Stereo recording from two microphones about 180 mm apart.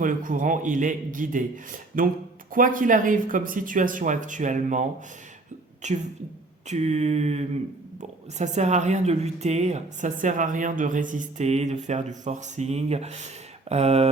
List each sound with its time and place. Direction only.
0.0 s a woman's voice: 50° right (ahead or behind)